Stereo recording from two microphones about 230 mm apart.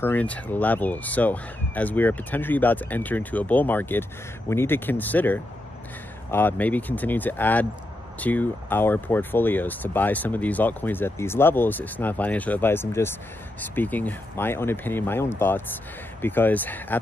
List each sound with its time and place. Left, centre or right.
0.0 s speech: centre